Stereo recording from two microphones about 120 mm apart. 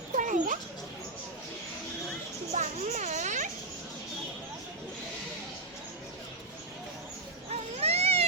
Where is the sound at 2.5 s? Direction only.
75° right (ahead or behind).